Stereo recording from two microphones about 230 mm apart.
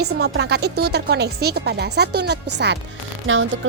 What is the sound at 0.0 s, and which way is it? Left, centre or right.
Speech, right.